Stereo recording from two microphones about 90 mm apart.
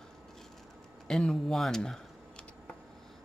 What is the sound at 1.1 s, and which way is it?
Speech, 5° left (ahead or behind).